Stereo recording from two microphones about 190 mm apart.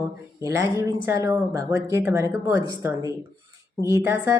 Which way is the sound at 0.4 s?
15° right (ahead or behind).